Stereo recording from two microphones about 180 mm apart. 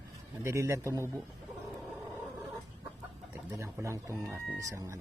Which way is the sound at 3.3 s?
15° right (ahead or behind).